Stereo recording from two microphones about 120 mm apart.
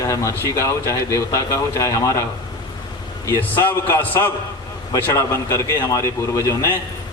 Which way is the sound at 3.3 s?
15° left (ahead or behind).